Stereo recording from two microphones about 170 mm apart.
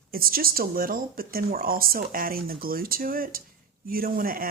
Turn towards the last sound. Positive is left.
turn(degrees=-55)  # may be behind; listen again after turning